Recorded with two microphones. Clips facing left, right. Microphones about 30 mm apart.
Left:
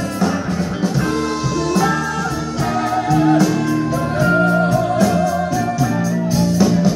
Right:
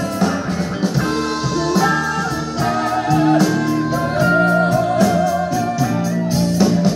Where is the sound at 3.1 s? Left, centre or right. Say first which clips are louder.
Even; centre.